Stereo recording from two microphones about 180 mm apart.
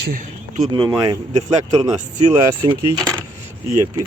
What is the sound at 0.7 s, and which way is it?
Speech, 25° right (ahead or behind).